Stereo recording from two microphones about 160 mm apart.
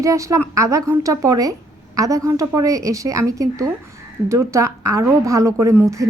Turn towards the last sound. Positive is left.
turn(degrees=-20)  # may be behind; listen again after turning